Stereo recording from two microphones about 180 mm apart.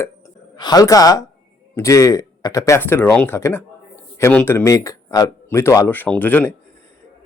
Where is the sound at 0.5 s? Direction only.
20° left (ahead or behind).